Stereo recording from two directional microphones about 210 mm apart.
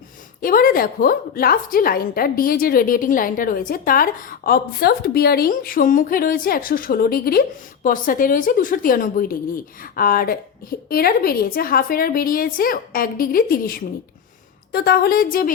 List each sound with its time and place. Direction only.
0.4 s a woman's voice: 45° left (ahead or behind)